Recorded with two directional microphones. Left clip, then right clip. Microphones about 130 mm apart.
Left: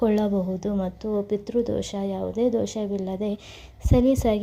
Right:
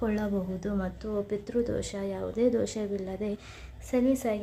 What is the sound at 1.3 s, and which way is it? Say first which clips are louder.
A woman's voice: left 4 dB; 30° left (ahead or behind).